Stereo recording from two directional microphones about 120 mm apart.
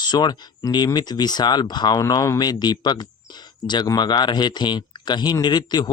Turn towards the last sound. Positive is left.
turn(degrees=35)  # may be behind; listen again after turning